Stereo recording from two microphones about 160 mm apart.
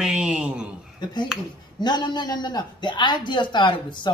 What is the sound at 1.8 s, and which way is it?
A man's voice, 25° left (ahead or behind).